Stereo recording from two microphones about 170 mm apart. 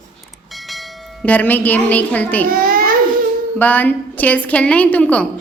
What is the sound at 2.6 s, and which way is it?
Baby cry, 55° right (ahead or behind).